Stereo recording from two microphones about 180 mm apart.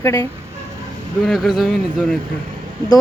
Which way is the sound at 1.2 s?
Centre (ahead or behind).